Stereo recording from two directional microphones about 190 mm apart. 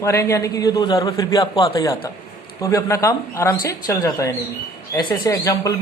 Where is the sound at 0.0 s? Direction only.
15° left (ahead or behind).